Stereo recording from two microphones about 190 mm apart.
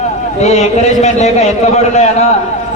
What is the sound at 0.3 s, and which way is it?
A man's voice, 35° left (ahead or behind).